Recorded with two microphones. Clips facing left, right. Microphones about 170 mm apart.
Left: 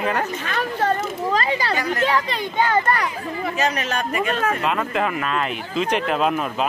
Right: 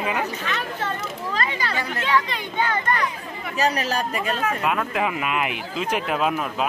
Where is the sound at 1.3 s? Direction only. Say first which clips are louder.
Left 4 dB; 35° left (ahead or behind).